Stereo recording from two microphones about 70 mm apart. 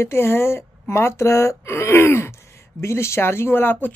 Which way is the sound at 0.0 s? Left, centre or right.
Left.